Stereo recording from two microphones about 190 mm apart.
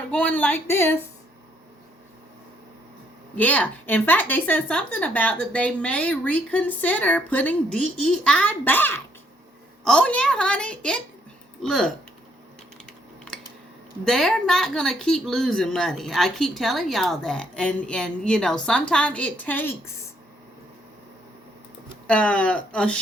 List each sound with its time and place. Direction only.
0.1 s a woman's voice: 5° left (ahead or behind)
3.3 s a woman's voice: 10° left (ahead or behind)
14.0 s speech: centre (ahead or behind)
22.0 s speech: 5° left (ahead or behind)